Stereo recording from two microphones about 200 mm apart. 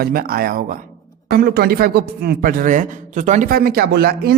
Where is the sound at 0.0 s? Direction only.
50° right (ahead or behind).